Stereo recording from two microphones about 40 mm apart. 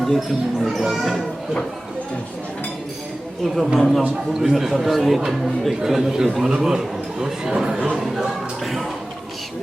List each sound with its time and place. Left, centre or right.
0.0 s speech: centre
3.4 s a man's voice: centre
4.5 s speech: centre
8.0 s music: centre